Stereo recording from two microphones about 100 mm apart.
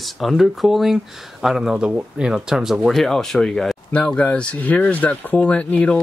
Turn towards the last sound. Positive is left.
turn(degrees=15)  # may be behind; listen again after turning